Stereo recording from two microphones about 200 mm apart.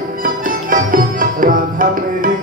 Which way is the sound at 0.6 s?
45° right (ahead or behind).